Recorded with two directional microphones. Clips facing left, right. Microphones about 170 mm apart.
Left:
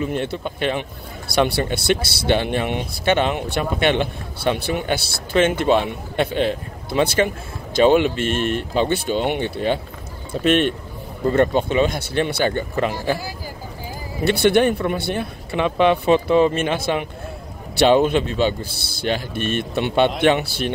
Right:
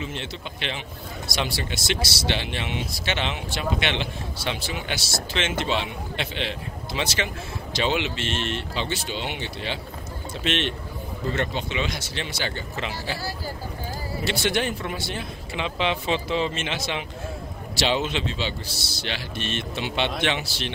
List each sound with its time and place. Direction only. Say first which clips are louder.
0.0 s speech: left 10 dB; 50° left (ahead or behind)
14.2 s speech: left 10 dB; 55° left (ahead or behind)